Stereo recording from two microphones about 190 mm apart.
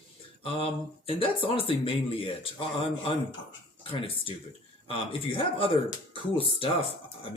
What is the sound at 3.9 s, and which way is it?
Speech, 30° left (ahead or behind).